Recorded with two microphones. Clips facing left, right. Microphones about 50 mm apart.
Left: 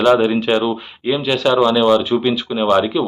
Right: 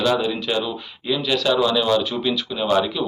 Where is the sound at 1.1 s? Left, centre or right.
Left.